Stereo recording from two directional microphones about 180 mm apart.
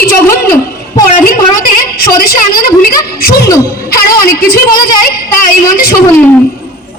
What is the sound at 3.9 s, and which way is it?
A woman's voice, 55° left (ahead or behind).